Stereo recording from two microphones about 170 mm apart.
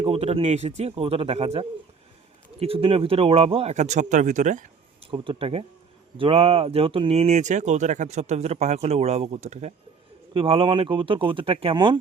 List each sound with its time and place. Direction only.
0.0 s speech: 35° right (ahead or behind)
5.1 s speech: 30° right (ahead or behind)